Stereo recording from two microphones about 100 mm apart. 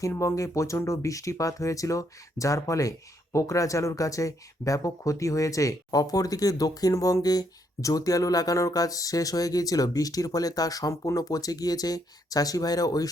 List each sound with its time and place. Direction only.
0.1 s speech: 25° left (ahead or behind)